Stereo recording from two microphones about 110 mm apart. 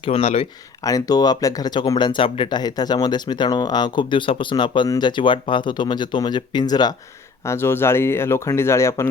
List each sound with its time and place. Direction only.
0.0 s speech: 65° left (ahead or behind)
0.8 s speech: 30° left (ahead or behind)
7.4 s speech: 25° left (ahead or behind)